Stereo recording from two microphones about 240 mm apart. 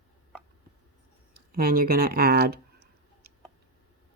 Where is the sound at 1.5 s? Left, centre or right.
Right.